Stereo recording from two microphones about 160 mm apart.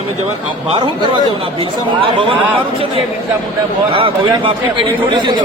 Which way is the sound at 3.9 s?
35° right (ahead or behind).